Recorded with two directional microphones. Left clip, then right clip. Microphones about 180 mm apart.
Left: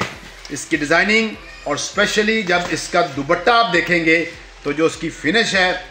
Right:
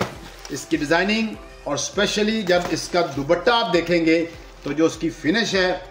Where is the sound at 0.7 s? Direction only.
40° left (ahead or behind).